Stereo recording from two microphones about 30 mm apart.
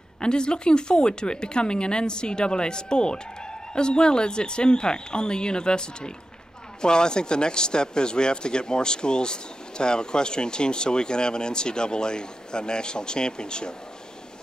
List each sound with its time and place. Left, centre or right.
0.2 s speech: left